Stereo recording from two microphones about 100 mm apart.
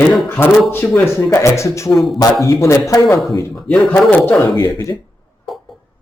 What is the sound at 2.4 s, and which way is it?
Speech, 30° left (ahead or behind).